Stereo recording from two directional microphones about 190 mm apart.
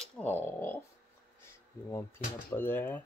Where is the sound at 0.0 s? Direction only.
10° left (ahead or behind).